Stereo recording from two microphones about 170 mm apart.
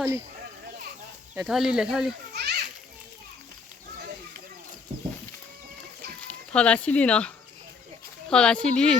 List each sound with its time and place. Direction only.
1.4 s speech: 5° right (ahead or behind)
2.3 s children playing: 75° right (ahead or behind)
6.2 s speech: 5° left (ahead or behind)